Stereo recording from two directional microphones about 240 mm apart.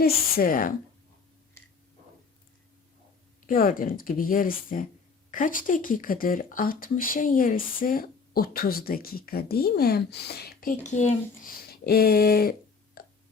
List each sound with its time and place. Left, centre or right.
0.0 s speech: left
3.4 s speech: left